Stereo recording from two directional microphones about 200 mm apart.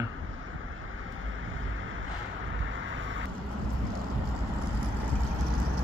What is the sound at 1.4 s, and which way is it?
Vehicle, 75° right (ahead or behind).